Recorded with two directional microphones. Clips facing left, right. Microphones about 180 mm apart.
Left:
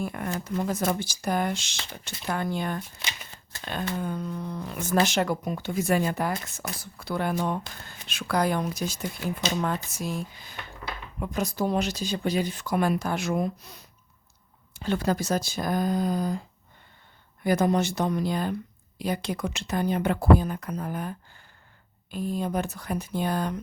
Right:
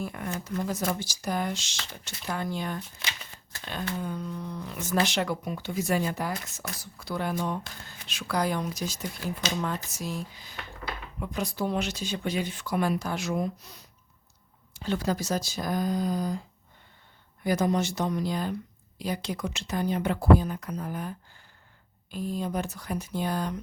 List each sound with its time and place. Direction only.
0.0 s speech: 55° left (ahead or behind)
17.4 s speech: 55° left (ahead or behind)